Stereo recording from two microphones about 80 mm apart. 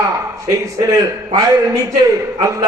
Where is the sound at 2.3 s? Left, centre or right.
Right.